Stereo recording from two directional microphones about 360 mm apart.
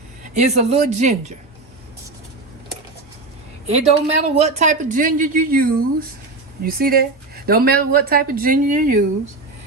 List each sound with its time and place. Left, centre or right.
0.3 s a woman's voice: centre
3.7 s a woman's voice: centre